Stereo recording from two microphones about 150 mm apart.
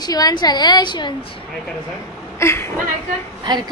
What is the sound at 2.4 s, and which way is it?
Speech, 15° left (ahead or behind).